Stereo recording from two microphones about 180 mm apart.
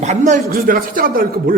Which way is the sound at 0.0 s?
40° right (ahead or behind).